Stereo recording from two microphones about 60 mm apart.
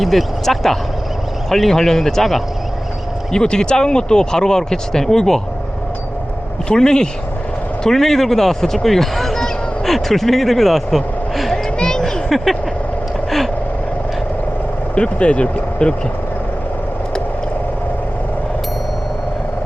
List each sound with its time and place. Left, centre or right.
0.0 s speech: centre
6.7 s speech: centre
11.8 s a sound: centre
14.9 s speech: centre